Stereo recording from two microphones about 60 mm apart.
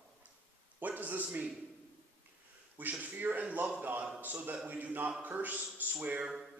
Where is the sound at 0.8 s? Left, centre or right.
Right.